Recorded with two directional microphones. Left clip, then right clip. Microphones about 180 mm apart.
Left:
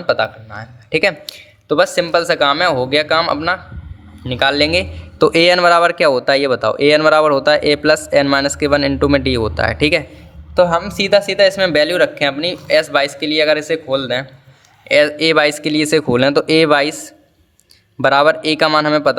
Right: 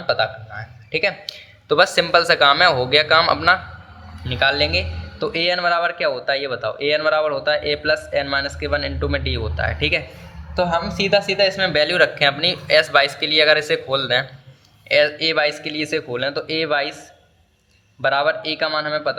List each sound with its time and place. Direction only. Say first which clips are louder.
0.1 s a man's voice: left 4 dB; 45° left (ahead or behind)
1.6 s speech: left 2 dB; 25° left (ahead or behind)
4.3 s a man's voice: left 4 dB; 40° left (ahead or behind)
10.5 s a man's voice: left 7 dB; 50° left (ahead or behind); by 14.3 s 30° left (ahead or behind)
14.8 s a man's voice: left 5 dB; 40° left (ahead or behind)
18.0 s a man's voice: left 7 dB; 40° left (ahead or behind)